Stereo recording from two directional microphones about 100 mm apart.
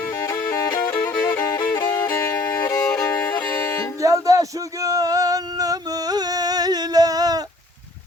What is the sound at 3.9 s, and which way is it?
Male singing, 35° right (ahead or behind).